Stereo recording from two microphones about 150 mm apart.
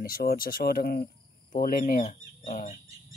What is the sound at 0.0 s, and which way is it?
Speech, 85° left.